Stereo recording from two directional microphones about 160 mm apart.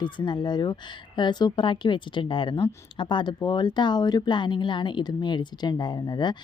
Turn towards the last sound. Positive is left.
turn(degrees=25)  # may be behind; listen again after turning